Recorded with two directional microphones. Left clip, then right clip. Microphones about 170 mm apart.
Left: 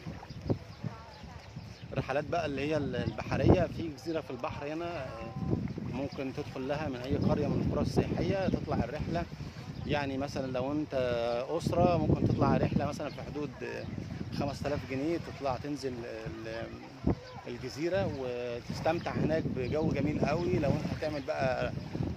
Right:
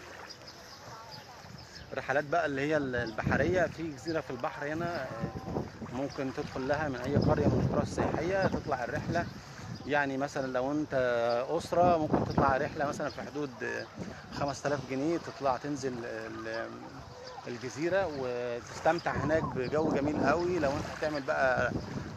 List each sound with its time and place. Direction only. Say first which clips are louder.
2.0 s speech: right 3 dB; centre (ahead or behind)
6.1 s speech: right 2 dB; centre (ahead or behind)
17.5 s speech: right 1 dB; 10° left (ahead or behind)